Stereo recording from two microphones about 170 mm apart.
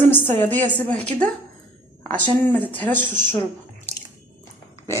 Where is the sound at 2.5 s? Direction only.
10° left (ahead or behind).